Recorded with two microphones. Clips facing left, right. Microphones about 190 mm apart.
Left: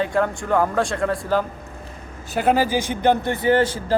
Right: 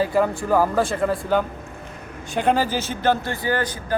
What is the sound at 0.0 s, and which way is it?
A man's voice, 5° right (ahead or behind).